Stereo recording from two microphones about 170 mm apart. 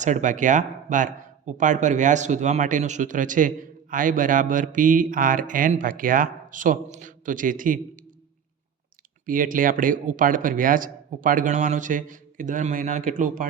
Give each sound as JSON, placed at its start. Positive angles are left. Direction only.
{"t": 0.0, "sound": "speech", "side_deg": -45}
{"t": 9.2, "sound": "speech", "side_deg": -55}